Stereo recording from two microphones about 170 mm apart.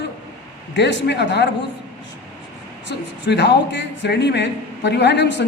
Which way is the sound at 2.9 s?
90° left.